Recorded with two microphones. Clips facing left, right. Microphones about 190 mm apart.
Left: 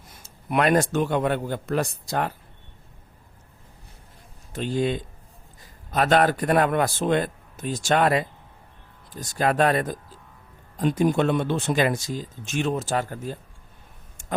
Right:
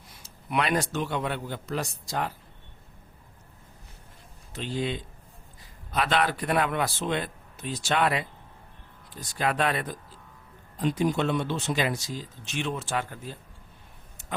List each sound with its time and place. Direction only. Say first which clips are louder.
0.1 s speech: left 4 dB; 50° left (ahead or behind)
4.5 s speech: left 6 dB; 50° left (ahead or behind)
14.2 s a sound: left 6 dB; 45° left (ahead or behind)